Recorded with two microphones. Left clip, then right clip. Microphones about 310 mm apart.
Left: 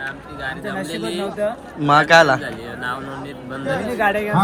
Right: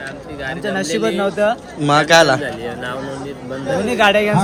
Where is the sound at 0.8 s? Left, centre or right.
Centre.